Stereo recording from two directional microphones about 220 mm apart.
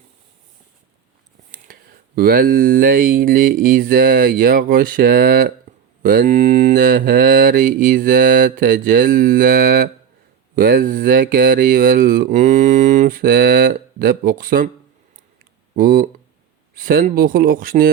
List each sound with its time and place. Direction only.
1.5 s speech: 40° right (ahead or behind)
5.7 s a sound: 40° right (ahead or behind)
6.0 s speech: 40° right (ahead or behind)
15.7 s speech: 40° right (ahead or behind)